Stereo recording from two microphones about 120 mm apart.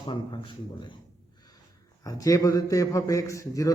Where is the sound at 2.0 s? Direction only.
30° left (ahead or behind).